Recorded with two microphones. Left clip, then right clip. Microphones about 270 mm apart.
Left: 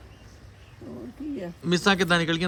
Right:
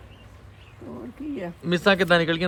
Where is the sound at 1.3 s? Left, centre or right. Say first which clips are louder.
Right 1 dB; centre.